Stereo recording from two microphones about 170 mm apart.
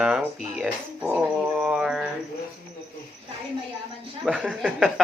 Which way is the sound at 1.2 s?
5° right (ahead or behind).